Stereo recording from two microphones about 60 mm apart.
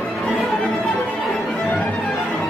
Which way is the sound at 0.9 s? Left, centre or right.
Centre.